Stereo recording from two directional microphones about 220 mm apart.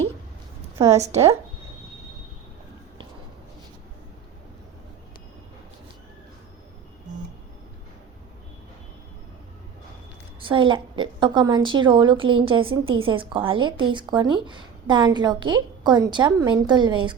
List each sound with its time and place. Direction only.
0.9 s a woman's voice: 30° right (ahead or behind)
10.4 s a woman's voice: 20° right (ahead or behind)